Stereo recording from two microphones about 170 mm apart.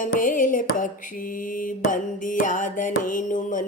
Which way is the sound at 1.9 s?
50° left (ahead or behind).